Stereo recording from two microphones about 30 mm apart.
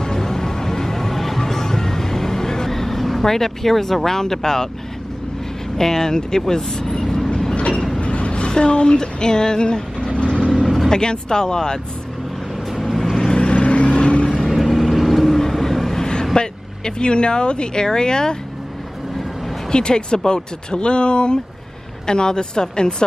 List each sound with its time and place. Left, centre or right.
0.0 s music: left
5.8 s speech: centre
7.2 s vehicle: left
7.5 s train: left
8.0 s a sound: left
10.5 s vehicle: centre
10.9 s speech: left
12.7 s vehicle: centre
13.3 s vehicle: left
14.2 s vehicle: left
14.5 s vehicle: centre
16.3 s speech: left
19.7 s speech: left